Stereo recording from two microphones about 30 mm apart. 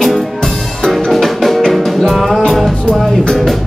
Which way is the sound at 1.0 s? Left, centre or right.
Centre.